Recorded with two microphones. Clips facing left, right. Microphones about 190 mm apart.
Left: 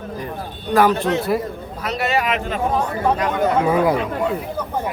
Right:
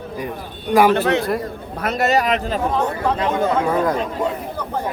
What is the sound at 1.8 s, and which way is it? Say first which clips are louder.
Speech: right 3 dB; 45° right (ahead or behind).